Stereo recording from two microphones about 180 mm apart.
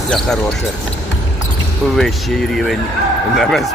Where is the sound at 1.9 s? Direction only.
Centre (ahead or behind).